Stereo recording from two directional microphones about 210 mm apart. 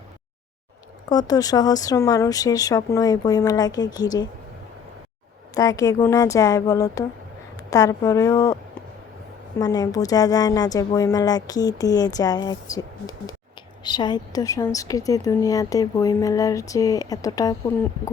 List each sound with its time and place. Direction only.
1.1 s speech: 15° left (ahead or behind)
5.5 s speech: 15° left (ahead or behind)
9.6 s speech: 15° left (ahead or behind)